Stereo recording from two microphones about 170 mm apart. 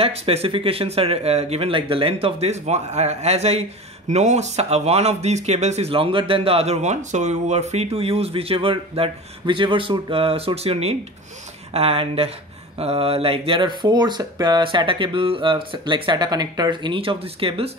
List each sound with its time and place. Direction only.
0.0 s speech: 35° right (ahead or behind)